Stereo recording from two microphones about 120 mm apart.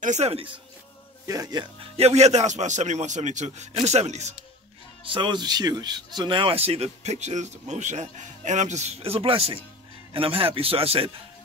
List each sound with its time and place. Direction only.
0.0 s speech: 70° right (ahead or behind)
1.2 s a man's voice: 30° right (ahead or behind)
1.8 s a man's voice: 60° right (ahead or behind)
5.0 s speech: 45° right (ahead or behind)